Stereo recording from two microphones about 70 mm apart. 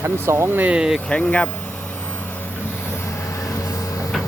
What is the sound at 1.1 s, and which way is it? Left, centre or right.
Speech, centre.